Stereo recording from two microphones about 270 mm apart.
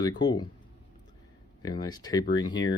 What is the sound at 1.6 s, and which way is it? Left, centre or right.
Speech, centre.